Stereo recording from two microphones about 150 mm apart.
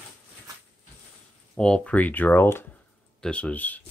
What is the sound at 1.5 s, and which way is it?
Speech, 5° left (ahead or behind).